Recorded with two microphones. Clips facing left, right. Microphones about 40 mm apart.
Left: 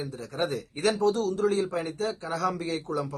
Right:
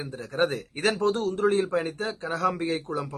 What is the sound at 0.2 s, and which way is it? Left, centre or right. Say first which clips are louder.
Speech: right 5 dB; right.